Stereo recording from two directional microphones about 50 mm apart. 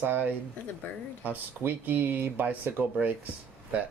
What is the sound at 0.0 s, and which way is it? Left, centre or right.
Speech, right.